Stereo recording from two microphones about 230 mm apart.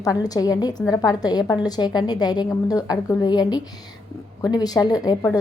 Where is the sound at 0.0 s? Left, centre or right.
Centre.